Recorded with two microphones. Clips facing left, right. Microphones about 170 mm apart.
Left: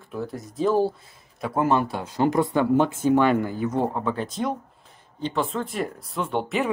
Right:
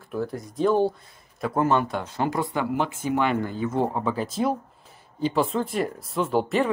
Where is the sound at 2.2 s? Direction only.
20° left (ahead or behind).